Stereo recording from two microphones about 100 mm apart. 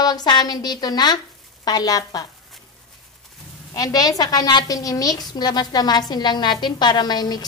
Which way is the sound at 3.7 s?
35° left (ahead or behind).